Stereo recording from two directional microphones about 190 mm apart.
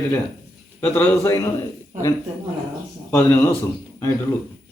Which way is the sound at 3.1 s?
10° left (ahead or behind).